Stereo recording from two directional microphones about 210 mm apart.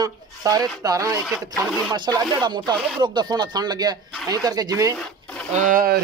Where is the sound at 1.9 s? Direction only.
20° right (ahead or behind).